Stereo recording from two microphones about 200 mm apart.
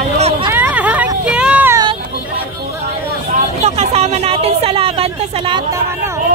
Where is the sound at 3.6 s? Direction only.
30° right (ahead or behind).